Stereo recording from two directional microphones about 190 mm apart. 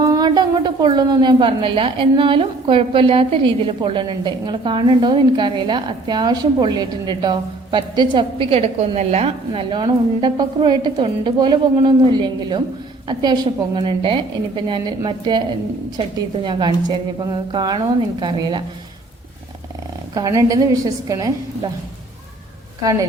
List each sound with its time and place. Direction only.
0.0 s a woman's voice: 20° right (ahead or behind)
20.1 s a woman's voice: 20° right (ahead or behind)
22.8 s a woman's voice: 20° right (ahead or behind)